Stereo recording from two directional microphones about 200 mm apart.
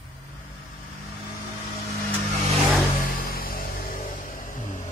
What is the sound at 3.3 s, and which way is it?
Music, 45° left (ahead or behind).